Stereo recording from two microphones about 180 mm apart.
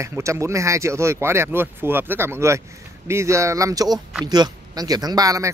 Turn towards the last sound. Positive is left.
turn(degrees=-20)  # may be behind; listen again after turning